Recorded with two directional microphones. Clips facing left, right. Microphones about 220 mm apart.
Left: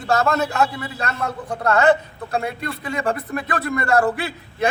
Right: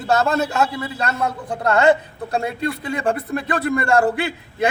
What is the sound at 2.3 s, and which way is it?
Speech, 30° right (ahead or behind).